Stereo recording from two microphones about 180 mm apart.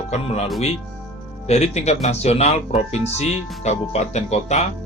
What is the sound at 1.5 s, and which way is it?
Speech, 35° left (ahead or behind).